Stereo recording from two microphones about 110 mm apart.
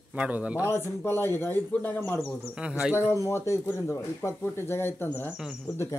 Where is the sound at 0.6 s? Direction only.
20° left (ahead or behind).